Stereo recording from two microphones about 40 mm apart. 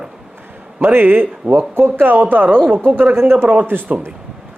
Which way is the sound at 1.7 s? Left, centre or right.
Right.